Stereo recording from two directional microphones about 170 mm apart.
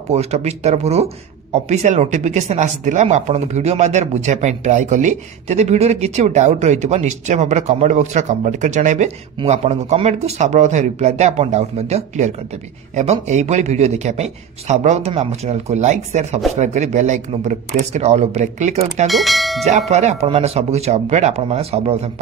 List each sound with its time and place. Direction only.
0.1 s a man's voice: 40° right (ahead or behind)
19.0 s speech: centre (ahead or behind)
19.9 s a man's voice: 40° right (ahead or behind)